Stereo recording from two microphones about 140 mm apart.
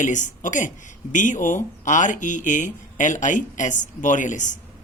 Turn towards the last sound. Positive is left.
turn(degrees=65)  # may be behind; listen again after turning